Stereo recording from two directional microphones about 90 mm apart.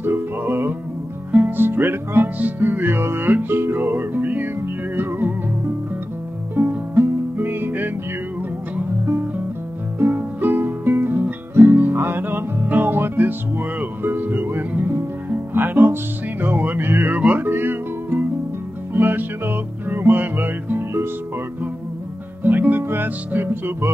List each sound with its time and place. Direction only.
0.0 s music: 25° right (ahead or behind)
6.5 s music: 25° right (ahead or behind)
9.9 s music: 25° right (ahead or behind)
22.4 s music: 20° right (ahead or behind)